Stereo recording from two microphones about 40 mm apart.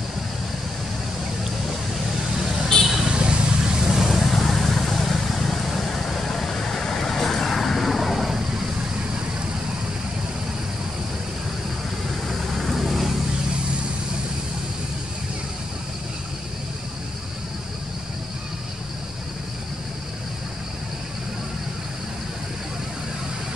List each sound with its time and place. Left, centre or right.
2.9 s vehicle: centre
3.2 s vehicle: right
3.9 s vehicle: centre
12.3 s vehicle: centre